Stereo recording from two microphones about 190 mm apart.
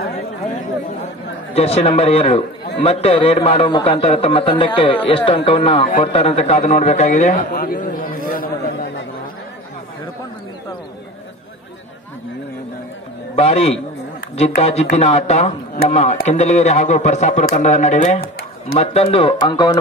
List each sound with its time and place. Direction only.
1.5 s a man's voice: 30° left (ahead or behind); by 8.0 s 50° left (ahead or behind)
13.4 s a man's voice: 30° left (ahead or behind)
18.8 s speech: 30° left (ahead or behind)